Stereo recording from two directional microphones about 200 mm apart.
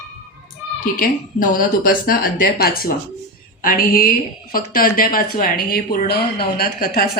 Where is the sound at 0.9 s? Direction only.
45° left (ahead or behind).